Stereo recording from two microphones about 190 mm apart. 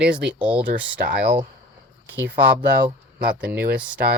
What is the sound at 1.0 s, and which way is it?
Speech, 55° right (ahead or behind).